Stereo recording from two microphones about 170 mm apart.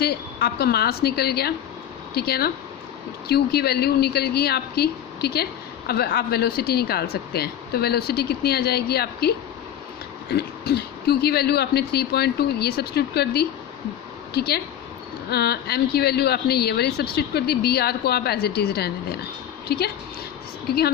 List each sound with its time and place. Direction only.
0.0 s speech: 70° left (ahead or behind)
10.3 s speech: 70° left (ahead or behind)